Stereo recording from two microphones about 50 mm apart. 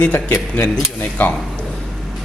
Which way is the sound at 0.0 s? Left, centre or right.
Left.